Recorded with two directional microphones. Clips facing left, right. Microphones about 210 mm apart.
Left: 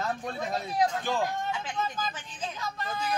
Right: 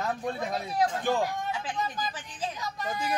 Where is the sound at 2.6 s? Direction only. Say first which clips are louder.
Left 1 dB; 15° right (ahead or behind).